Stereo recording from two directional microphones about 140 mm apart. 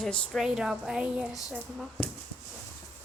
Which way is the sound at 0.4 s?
5° right (ahead or behind).